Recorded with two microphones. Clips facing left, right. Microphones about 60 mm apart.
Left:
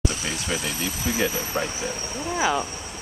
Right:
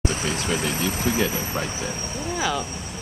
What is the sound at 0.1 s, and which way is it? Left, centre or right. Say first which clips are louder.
Speech: right 3 dB; right.